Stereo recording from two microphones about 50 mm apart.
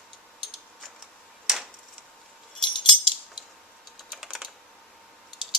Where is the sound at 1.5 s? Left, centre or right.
Centre.